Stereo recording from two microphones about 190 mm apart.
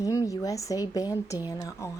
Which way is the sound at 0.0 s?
20° left (ahead or behind).